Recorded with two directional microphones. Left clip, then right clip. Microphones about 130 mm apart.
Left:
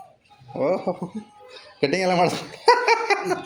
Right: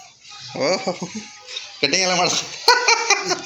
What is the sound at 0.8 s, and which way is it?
Speech, centre (ahead or behind).